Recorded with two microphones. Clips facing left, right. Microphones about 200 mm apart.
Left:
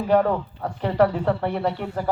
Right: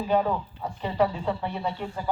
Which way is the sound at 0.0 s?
65° left (ahead or behind).